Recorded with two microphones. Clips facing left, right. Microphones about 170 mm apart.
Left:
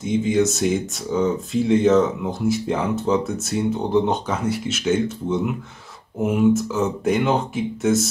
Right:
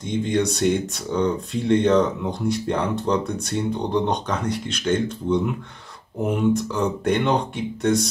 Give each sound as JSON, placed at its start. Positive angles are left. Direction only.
{"t": 0.0, "sound": "speech", "side_deg": 5}